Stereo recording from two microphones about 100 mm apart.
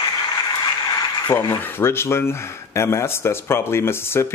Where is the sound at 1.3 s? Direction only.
25° left (ahead or behind).